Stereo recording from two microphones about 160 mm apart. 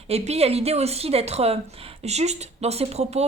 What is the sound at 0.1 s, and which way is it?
Speech, 40° right (ahead or behind).